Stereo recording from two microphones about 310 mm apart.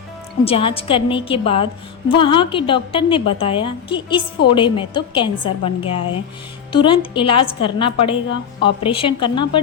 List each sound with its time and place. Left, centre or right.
0.4 s a woman's voice: centre